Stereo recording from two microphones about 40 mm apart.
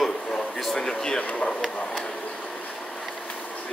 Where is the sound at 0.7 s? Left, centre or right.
Centre.